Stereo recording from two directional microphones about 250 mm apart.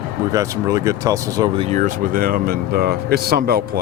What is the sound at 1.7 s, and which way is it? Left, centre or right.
Speech, right.